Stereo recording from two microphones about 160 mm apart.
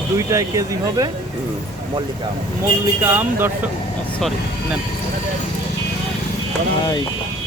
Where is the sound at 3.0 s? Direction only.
10° right (ahead or behind).